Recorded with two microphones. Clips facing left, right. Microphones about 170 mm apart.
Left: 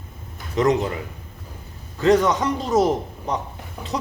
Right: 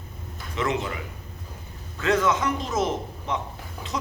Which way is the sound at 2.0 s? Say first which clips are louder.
Left 5 dB; 35° left (ahead or behind).